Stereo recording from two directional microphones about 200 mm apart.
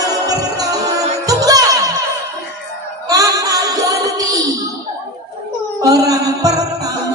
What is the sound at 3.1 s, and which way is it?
Music, 15° right (ahead or behind).